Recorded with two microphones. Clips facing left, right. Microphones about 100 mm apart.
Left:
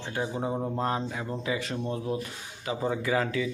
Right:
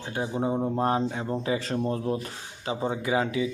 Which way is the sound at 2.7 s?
25° right (ahead or behind).